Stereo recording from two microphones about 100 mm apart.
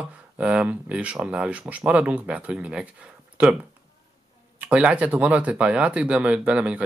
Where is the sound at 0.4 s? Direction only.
10° right (ahead or behind).